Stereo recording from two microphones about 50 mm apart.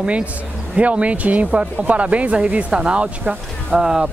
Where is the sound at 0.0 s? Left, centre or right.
Right.